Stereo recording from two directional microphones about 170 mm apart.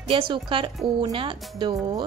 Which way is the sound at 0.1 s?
30° right (ahead or behind).